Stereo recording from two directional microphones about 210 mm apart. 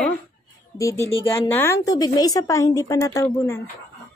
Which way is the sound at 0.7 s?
15° left (ahead or behind).